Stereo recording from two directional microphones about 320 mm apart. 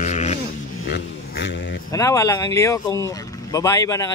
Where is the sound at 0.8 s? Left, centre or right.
Left.